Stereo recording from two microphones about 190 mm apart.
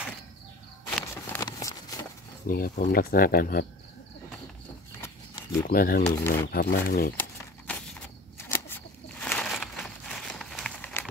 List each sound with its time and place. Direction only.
0.8 s a sound: 10° left (ahead or behind)
2.4 s speech: 50° left (ahead or behind)
5.0 s horse: 15° left (ahead or behind)
5.6 s speech: 50° left (ahead or behind)
7.7 s walk: 5° left (ahead or behind)
8.5 s a sound: 10° left (ahead or behind)